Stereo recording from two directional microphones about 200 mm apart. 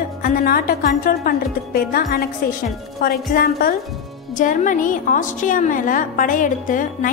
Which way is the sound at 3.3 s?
45° left (ahead or behind).